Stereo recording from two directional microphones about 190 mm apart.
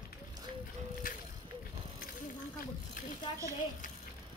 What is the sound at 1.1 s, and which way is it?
Bicycle, 45° left (ahead or behind).